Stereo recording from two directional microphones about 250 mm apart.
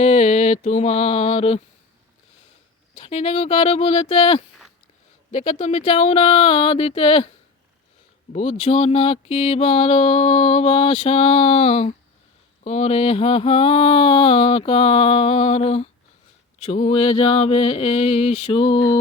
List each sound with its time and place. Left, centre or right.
0.0 s mantra: left
2.9 s mantra: left
8.3 s mantra: left